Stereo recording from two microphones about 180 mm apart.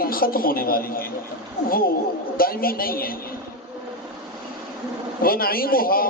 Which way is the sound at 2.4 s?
55° left (ahead or behind).